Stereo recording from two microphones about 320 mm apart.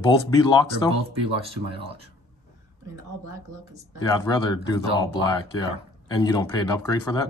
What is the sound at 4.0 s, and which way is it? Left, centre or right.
Speech, centre.